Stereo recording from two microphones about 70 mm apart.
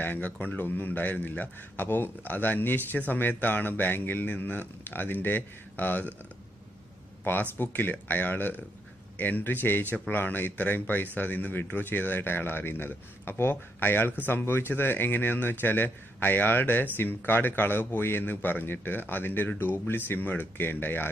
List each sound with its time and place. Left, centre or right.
0.0 s speech: left
7.2 s speech: left